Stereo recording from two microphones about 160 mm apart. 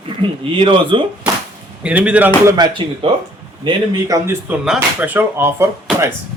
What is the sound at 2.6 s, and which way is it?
Speech, 30° right (ahead or behind).